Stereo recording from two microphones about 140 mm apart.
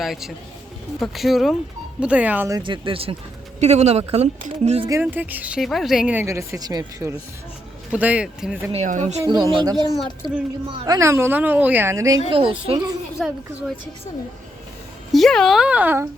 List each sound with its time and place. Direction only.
0.0 s speech: centre (ahead or behind)
2.5 s speech: 30° right (ahead or behind)
3.6 s speech: 50° right (ahead or behind)
4.9 s speech: 15° right (ahead or behind)
5.5 s speech: centre (ahead or behind)
6.2 s a woman's voice: 20° right (ahead or behind)
7.9 s speech: 10° right (ahead or behind)
8.7 s speech: 55° right (ahead or behind)
9.2 s a woman's voice: 30° right (ahead or behind)
12.3 s speech: 40° right (ahead or behind)
13.1 s speech: 5° right (ahead or behind)
15.1 s speech: 5° left (ahead or behind); by 16.0 s 15° right (ahead or behind)